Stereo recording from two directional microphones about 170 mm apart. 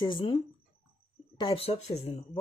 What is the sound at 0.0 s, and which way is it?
Speech, 25° left (ahead or behind).